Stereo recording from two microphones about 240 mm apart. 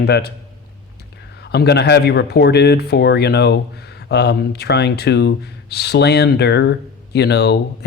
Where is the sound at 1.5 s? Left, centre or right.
Left.